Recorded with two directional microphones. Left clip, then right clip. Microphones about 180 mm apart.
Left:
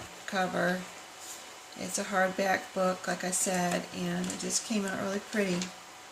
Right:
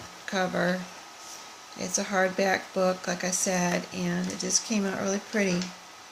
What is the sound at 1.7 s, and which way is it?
Speech, 45° right (ahead or behind).